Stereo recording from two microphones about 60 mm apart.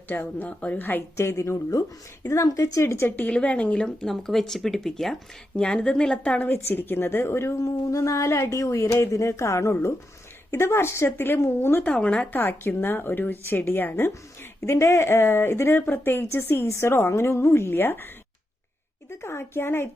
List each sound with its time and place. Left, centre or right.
0.1 s a woman's voice: left
1.1 s a woman's voice: left
2.8 s speech: left
3.2 s a woman's voice: left; by 5.1 s centre
5.5 s speech: centre
6.5 s a woman's voice: left
11.8 s a woman's voice: left
12.3 s a woman's voice: left
14.6 s speech: left
19.2 s speech: left